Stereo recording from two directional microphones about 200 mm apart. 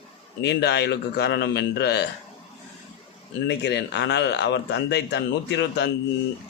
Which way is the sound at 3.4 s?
60° left (ahead or behind).